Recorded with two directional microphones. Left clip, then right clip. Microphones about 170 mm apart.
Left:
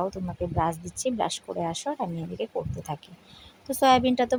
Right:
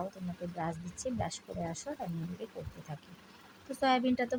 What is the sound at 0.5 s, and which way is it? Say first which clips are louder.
Speech: left 12 dB; 35° left (ahead or behind).